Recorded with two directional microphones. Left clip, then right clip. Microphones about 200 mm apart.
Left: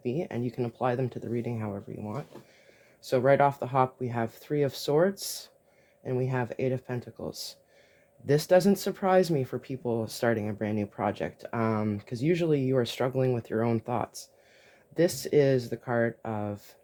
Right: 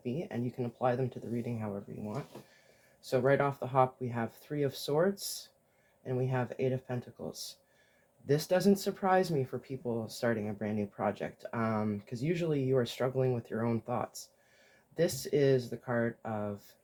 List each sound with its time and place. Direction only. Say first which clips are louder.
0.0 s speech: left 6 dB; 50° left (ahead or behind)